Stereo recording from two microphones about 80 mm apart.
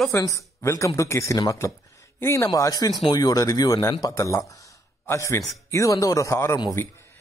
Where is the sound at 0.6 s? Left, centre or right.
Left.